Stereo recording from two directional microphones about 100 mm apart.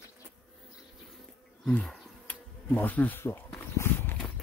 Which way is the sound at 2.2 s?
15° left (ahead or behind).